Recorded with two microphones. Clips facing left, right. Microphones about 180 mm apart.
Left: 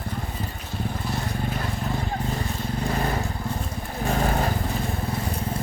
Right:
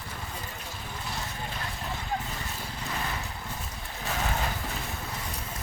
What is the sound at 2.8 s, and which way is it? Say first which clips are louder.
Vehicle: left 8 dB; 45° left (ahead or behind).